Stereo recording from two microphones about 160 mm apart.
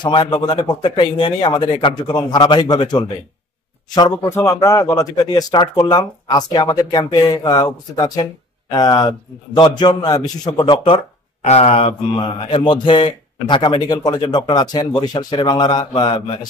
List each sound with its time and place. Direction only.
0.0 s speech: 30° left (ahead or behind)
4.2 s speech: 15° left (ahead or behind); by 16.3 s 30° left (ahead or behind)